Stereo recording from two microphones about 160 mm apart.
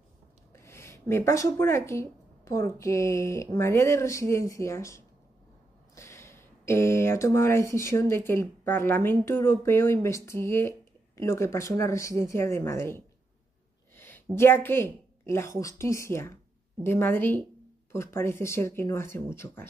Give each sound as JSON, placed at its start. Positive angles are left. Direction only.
{"t": 0.5, "sound": "a woman's voice", "side_deg": 15}